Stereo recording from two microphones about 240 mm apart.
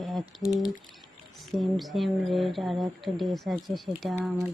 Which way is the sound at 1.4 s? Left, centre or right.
Centre.